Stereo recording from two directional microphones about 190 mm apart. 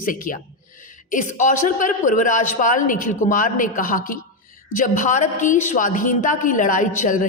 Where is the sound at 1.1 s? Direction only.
40° left (ahead or behind).